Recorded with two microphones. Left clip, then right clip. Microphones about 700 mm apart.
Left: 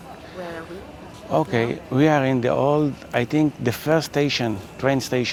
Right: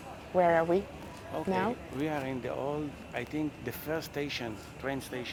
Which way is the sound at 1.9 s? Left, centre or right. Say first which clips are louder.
Left 16 dB; left.